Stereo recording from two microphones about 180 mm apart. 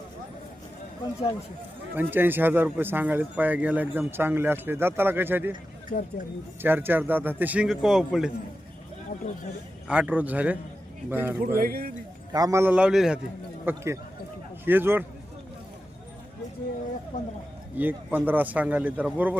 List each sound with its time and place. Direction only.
2.0 s speech: 10° right (ahead or behind)
5.9 s speech: 50° left (ahead or behind)
6.6 s speech: 10° right (ahead or behind)
9.8 s speech: 10° right (ahead or behind)
11.3 s speech: 55° right (ahead or behind)
12.3 s speech: 20° right (ahead or behind); by 13.1 s 5° right (ahead or behind)
13.7 s a man's voice: 15° right (ahead or behind)
17.1 s speech: 45° left (ahead or behind)
17.7 s speech: 10° right (ahead or behind)